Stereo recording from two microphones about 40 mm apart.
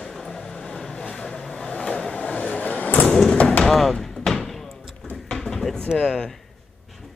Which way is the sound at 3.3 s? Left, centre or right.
Left.